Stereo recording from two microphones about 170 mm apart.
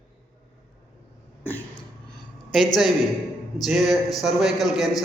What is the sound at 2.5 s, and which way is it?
A man's voice, centre (ahead or behind).